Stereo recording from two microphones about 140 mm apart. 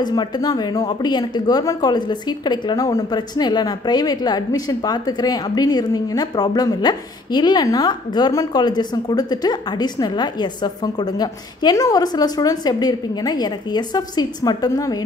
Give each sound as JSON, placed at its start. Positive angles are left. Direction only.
{"t": 0.0, "sound": "a woman's voice", "side_deg": 30}